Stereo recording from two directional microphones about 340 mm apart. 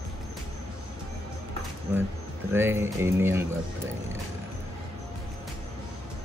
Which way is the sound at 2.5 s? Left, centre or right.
Centre.